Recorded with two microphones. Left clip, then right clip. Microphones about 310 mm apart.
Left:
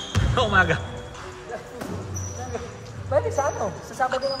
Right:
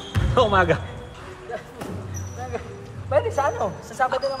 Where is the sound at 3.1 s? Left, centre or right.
Right.